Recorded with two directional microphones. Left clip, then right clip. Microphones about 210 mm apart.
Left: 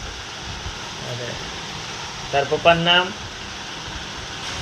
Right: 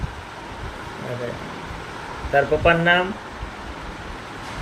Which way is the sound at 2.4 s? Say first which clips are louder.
Left 1 dB; 10° right (ahead or behind).